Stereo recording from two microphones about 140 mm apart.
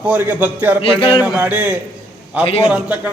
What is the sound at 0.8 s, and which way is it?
Music, 40° left (ahead or behind).